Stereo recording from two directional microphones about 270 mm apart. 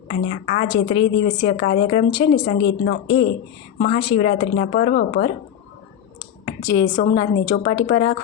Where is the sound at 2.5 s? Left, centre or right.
Left.